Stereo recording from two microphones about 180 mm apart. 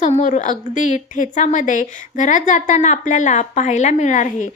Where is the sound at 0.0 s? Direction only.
40° left (ahead or behind).